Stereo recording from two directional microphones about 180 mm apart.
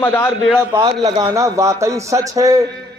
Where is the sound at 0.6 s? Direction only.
20° right (ahead or behind).